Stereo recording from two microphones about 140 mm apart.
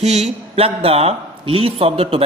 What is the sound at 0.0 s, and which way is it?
A woman's voice, 50° right (ahead or behind).